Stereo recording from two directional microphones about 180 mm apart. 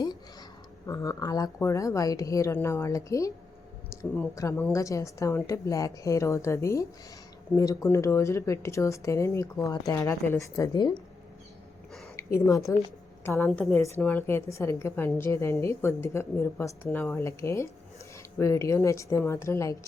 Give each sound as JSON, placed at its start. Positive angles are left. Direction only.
{"t": 0.9, "sound": "speech", "side_deg": 20}
{"t": 12.1, "sound": "a woman's voice", "side_deg": 15}